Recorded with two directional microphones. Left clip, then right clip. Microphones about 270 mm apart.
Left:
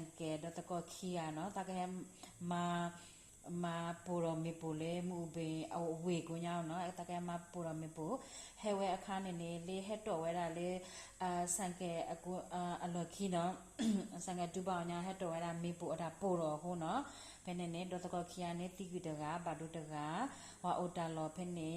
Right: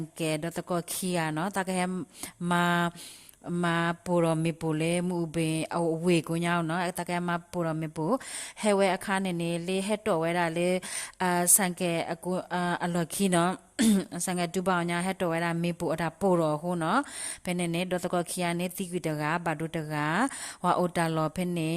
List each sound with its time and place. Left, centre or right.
0.2 s speech: right